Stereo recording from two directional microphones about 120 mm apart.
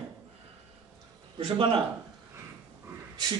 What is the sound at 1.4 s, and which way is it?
Speech, 50° right (ahead or behind).